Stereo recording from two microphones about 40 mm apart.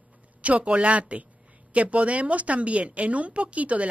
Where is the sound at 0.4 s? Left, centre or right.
Right.